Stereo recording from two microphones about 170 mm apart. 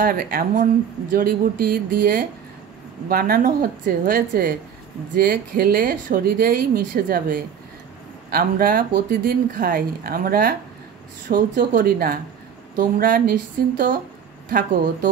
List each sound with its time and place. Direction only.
0.0 s speech: 60° right (ahead or behind)